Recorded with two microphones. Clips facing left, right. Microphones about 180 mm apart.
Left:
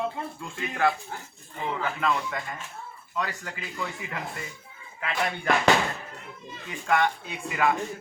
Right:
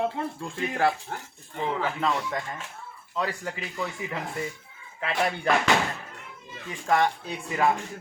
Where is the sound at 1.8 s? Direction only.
25° right (ahead or behind).